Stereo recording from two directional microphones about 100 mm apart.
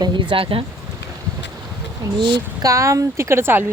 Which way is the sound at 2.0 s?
40° right (ahead or behind).